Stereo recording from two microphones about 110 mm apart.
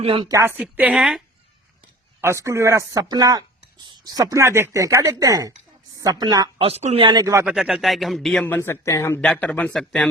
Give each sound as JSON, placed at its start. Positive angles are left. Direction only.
{"t": 0.0, "sound": "speech", "side_deg": -50}
{"t": 0.3, "sound": "speech", "side_deg": -25}
{"t": 0.5, "sound": "speech", "side_deg": -15}
{"t": 0.9, "sound": "speech", "side_deg": -5}
{"t": 2.2, "sound": "speech", "side_deg": -25}
{"t": 6.6, "sound": "speech", "side_deg": -70}
{"t": 7.0, "sound": "speech", "side_deg": -40}
{"t": 7.4, "sound": "speech", "side_deg": -5}
{"t": 8.4, "sound": "speech", "side_deg": 20}
{"t": 9.2, "sound": "a man's voice", "side_deg": 10}